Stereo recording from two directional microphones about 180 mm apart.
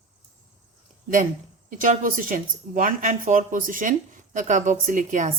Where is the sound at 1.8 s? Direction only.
45° right (ahead or behind).